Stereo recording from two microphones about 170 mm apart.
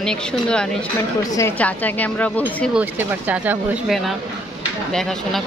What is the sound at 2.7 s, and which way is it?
Speech, 10° right (ahead or behind).